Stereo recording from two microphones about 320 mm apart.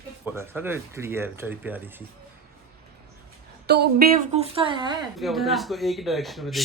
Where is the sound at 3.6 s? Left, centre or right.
Right; by 4.9 s centre.